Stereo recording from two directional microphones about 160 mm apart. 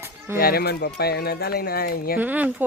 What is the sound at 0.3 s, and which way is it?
Speech, 70° left (ahead or behind).